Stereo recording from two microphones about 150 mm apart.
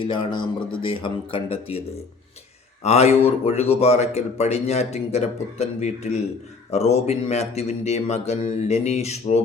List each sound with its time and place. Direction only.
0.0 s speech: 35° left (ahead or behind)
2.8 s speech: 45° left (ahead or behind)